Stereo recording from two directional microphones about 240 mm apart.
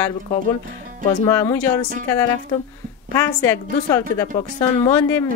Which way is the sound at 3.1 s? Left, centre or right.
Centre.